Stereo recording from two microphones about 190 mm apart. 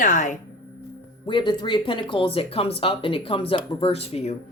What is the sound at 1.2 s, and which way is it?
Speech, 25° left (ahead or behind).